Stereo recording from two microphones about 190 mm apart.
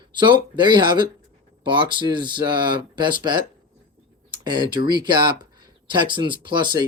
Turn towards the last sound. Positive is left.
turn(degrees=-25)  # may be behind; listen again after turning